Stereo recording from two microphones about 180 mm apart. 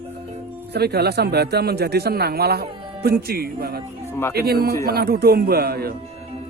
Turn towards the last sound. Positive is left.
turn(degrees=-60)  # may be behind; listen again after turning